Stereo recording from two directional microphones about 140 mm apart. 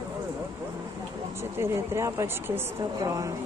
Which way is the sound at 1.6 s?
20° right (ahead or behind).